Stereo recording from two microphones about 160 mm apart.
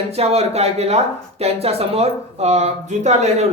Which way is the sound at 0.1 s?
40° right (ahead or behind).